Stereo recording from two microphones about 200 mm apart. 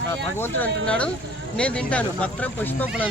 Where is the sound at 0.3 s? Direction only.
10° left (ahead or behind).